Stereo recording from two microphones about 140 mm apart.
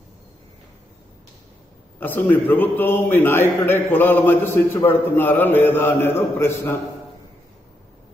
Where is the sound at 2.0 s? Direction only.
10° left (ahead or behind).